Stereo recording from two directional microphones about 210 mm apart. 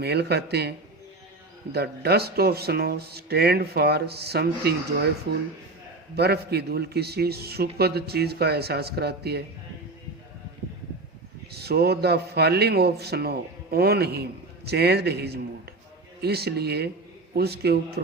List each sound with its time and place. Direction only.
0.0 s a man's voice: 50° right (ahead or behind)
1.7 s a man's voice: 50° right (ahead or behind)
6.1 s a man's voice: 50° right (ahead or behind)
11.5 s a man's voice: 50° right (ahead or behind)